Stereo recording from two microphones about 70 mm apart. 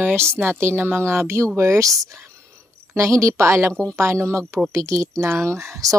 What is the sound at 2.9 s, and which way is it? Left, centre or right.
Speech, right.